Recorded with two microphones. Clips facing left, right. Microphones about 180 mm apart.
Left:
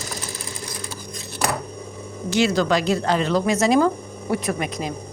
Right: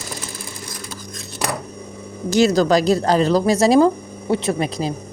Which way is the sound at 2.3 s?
40° right (ahead or behind).